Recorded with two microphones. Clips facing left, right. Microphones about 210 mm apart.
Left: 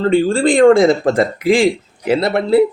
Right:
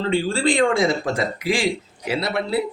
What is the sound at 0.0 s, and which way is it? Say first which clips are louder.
Speech: left 7 dB; 50° left (ahead or behind).